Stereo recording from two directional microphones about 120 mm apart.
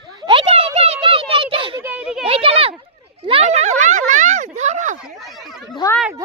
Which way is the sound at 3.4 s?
75° right (ahead or behind).